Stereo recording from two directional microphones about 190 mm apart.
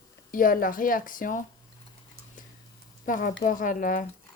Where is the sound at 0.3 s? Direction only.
45° left (ahead or behind).